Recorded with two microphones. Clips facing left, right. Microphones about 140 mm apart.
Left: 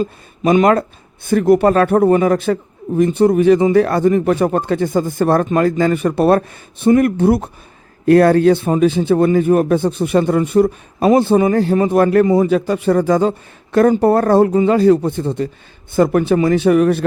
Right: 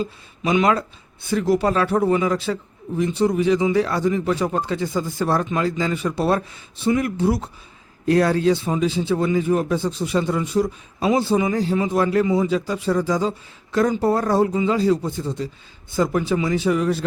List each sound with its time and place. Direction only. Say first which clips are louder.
0.0 s a man's voice: left 7 dB; 50° left (ahead or behind)